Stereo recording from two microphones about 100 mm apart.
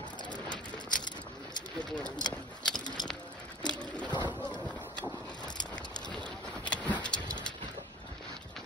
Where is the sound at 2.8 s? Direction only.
45° left (ahead or behind).